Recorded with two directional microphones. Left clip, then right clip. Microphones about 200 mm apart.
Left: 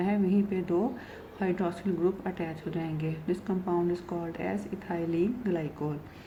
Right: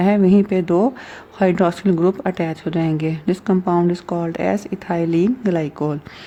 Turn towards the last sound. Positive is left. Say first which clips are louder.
# right 12 dB
turn(degrees=-50)  # may be behind; listen again after turning